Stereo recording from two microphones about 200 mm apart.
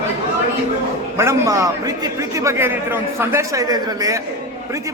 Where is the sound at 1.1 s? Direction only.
15° right (ahead or behind).